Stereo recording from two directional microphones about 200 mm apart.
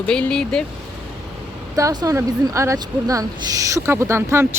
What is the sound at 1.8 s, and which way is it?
Speech, 15° right (ahead or behind).